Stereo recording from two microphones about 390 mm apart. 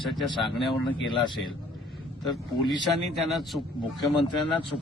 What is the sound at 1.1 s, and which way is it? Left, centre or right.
Speech, centre.